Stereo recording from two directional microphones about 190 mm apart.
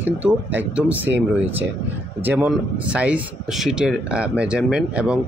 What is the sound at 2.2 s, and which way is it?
Speech, 10° right (ahead or behind).